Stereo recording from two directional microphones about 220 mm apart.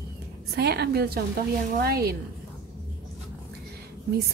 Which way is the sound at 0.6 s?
50° right (ahead or behind).